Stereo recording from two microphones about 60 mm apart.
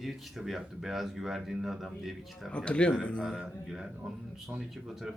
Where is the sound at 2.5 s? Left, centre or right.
Centre.